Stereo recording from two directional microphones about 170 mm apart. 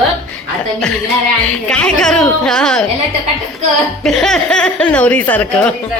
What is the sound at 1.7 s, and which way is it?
A woman's voice, 5° left (ahead or behind).